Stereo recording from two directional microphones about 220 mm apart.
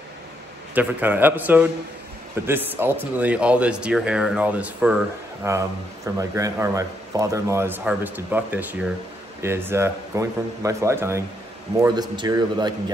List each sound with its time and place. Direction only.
0.7 s a man's voice: 10° right (ahead or behind)